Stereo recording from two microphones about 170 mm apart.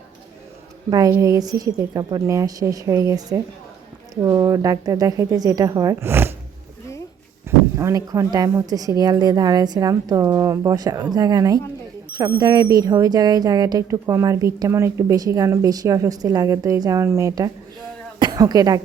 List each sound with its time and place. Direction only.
0.9 s speech: 20° right (ahead or behind)
7.4 s speech: 15° right (ahead or behind)
18.2 s cough: 25° right (ahead or behind)